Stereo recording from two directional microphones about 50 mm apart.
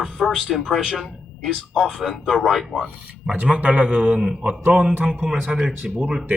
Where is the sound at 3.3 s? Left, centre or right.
Right.